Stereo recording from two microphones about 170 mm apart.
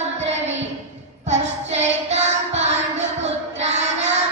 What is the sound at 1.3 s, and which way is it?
Child singing, 40° right (ahead or behind).